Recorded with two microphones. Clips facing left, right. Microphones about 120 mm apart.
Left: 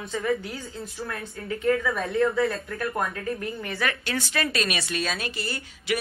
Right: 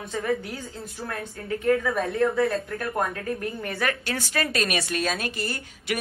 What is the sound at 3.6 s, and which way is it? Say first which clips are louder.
Speech: right 1 dB; 50° right (ahead or behind).